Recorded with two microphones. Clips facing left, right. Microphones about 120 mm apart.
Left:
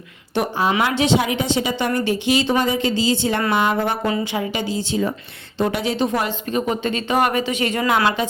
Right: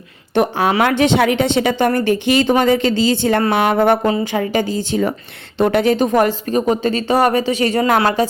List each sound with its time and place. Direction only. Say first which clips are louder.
0.4 s a woman's voice: right 4 dB; 55° right (ahead or behind)
4.0 s a woman's voice: right 4 dB; 40° right (ahead or behind)